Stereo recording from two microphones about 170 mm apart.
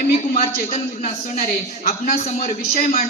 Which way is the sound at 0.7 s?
45° left (ahead or behind).